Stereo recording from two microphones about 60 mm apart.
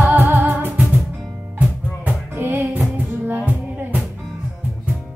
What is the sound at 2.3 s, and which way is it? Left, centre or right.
Music, right.